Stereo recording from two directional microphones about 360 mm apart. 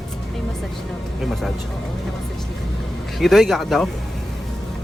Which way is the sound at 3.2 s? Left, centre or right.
Centre.